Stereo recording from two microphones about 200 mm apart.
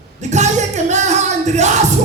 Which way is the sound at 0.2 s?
35° right (ahead or behind).